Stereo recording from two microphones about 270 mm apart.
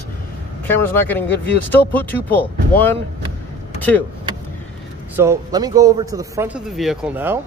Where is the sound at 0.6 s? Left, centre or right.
Centre.